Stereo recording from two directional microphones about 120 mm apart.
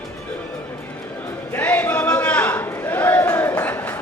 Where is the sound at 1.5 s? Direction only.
15° left (ahead or behind).